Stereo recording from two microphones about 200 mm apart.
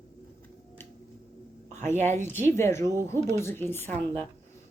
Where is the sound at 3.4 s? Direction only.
10° left (ahead or behind).